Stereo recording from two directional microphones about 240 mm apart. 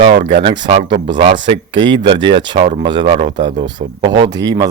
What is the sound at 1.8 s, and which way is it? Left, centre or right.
Speech, centre.